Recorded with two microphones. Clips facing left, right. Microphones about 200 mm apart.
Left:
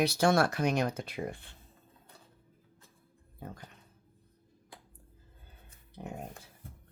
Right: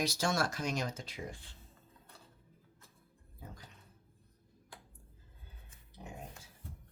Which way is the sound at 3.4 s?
60° left (ahead or behind).